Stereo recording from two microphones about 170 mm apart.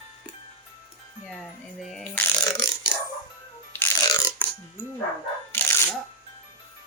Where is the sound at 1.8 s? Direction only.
Centre (ahead or behind).